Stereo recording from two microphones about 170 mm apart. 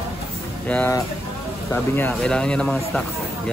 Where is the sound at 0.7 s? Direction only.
10° left (ahead or behind).